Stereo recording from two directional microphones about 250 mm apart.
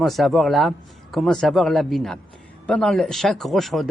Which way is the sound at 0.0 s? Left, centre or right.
Centre.